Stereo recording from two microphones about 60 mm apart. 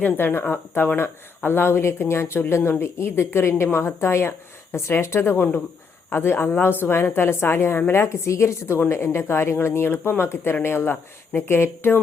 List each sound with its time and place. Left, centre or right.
0.2 s a woman's voice: left
5.4 s speech: left
6.1 s a woman's voice: left